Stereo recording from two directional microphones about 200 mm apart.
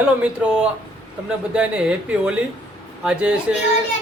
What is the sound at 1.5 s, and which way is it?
Speech, 5° right (ahead or behind).